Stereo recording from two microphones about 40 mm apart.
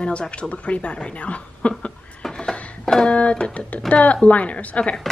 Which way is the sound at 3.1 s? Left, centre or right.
Left.